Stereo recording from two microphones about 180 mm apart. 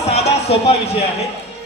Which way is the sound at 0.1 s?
35° left (ahead or behind).